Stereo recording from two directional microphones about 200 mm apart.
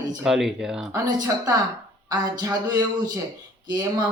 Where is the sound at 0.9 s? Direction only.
20° right (ahead or behind).